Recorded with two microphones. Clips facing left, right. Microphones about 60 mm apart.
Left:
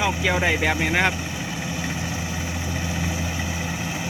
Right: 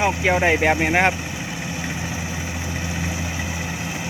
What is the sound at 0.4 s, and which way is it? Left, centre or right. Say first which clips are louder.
Speech: right 4 dB; right.